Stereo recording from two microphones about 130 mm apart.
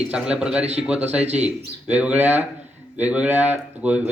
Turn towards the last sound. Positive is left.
turn(degrees=-10)  # may be behind; listen again after turning